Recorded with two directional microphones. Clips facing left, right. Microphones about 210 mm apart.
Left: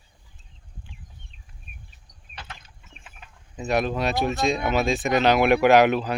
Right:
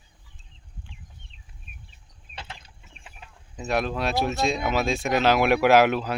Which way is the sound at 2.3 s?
30° right (ahead or behind).